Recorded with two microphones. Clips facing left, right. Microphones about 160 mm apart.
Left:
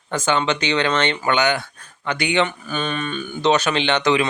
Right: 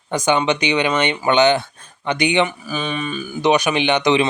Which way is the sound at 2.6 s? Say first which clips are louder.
Right 1 dB; 5° right (ahead or behind).